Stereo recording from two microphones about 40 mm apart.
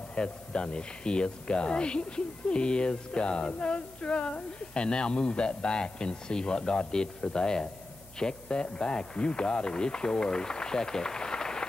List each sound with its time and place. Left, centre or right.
0.1 s speech: left